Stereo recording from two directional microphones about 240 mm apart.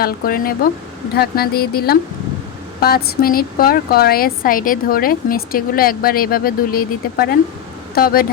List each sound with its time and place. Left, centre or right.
0.0 s a woman's voice: left